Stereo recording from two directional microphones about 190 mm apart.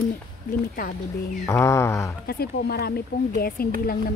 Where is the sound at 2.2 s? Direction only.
55° left (ahead or behind).